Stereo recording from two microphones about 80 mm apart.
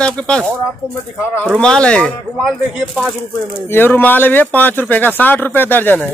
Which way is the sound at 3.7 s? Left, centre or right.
Left.